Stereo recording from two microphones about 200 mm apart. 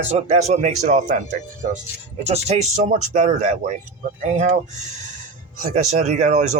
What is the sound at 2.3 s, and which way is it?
Speech, 35° right (ahead or behind).